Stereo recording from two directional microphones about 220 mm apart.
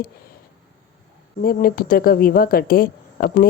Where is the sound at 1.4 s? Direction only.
40° left (ahead or behind).